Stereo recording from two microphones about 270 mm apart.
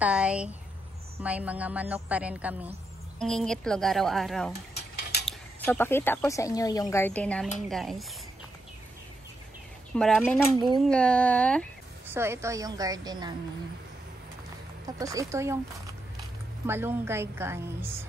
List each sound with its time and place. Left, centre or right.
0.0 s a woman's voice: centre
4.7 s mechanisms: left
5.7 s a woman's voice: centre
9.9 s a woman's voice: centre
12.1 s a woman's voice: centre
14.9 s a woman's voice: centre
16.6 s a woman's voice: centre